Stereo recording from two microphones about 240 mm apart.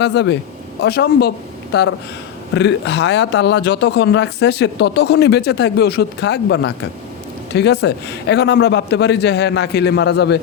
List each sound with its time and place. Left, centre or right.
0.0 s a man's voice: left